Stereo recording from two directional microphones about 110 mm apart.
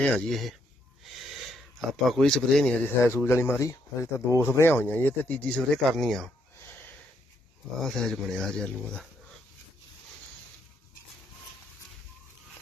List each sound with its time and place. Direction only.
0.0 s speech: 5° left (ahead or behind)
1.1 s a sound: centre (ahead or behind)
3.0 s speech: 25° left (ahead or behind); by 6.3 s centre (ahead or behind)
7.8 s speech: 5° left (ahead or behind)